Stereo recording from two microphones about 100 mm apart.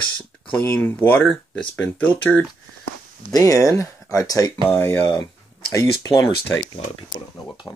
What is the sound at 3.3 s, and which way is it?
Speech, 35° left (ahead or behind).